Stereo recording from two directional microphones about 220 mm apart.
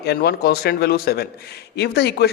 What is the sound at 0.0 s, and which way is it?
A man's voice, 45° left (ahead or behind).